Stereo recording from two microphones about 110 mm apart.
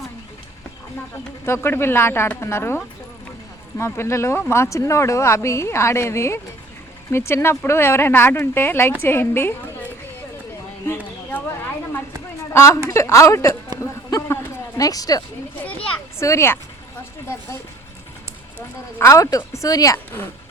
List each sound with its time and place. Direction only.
1.5 s speech: 20° left (ahead or behind)
10.8 s a sound: 15° left (ahead or behind)
12.5 s speech: 25° left (ahead or behind)
13.8 s run: 25° left (ahead or behind)
14.8 s speech: 35° left (ahead or behind)
18.9 s speech: 25° left (ahead or behind)